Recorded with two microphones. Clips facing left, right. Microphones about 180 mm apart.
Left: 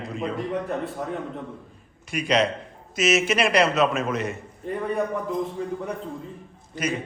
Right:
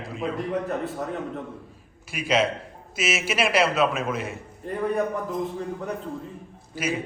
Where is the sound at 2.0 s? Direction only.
5° right (ahead or behind).